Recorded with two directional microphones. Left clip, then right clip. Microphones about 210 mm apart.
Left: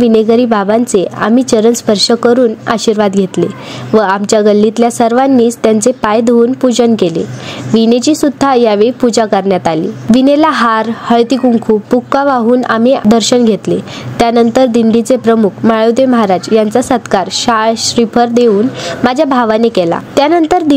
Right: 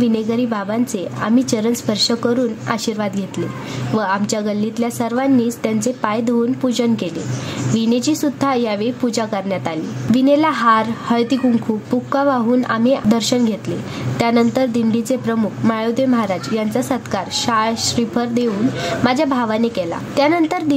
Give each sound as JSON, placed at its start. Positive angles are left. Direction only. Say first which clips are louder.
{"t": 0.0, "sound": "speech", "louder": "left 11 dB", "side_deg": 35}